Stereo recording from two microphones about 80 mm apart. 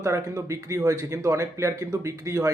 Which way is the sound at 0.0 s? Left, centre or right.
Right.